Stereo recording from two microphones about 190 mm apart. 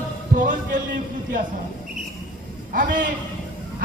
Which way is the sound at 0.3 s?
45° right (ahead or behind).